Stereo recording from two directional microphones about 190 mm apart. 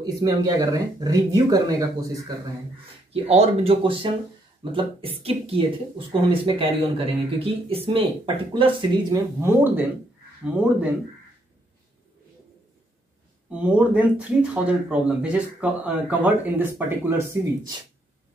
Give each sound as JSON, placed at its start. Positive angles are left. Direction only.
{"t": 0.0, "sound": "speech", "side_deg": -20}
{"t": 3.1, "sound": "speech", "side_deg": -30}
{"t": 13.5, "sound": "speech", "side_deg": -5}